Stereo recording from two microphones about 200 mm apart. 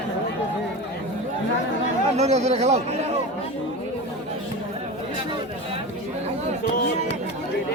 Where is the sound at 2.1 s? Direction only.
35° right (ahead or behind).